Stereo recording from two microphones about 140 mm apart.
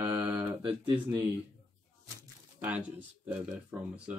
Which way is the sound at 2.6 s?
10° right (ahead or behind).